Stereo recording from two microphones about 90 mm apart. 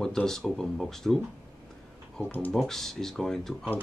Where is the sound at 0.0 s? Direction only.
5° left (ahead or behind).